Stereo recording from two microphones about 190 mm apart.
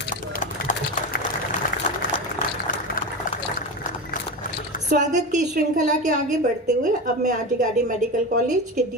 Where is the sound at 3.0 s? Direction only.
45° left (ahead or behind).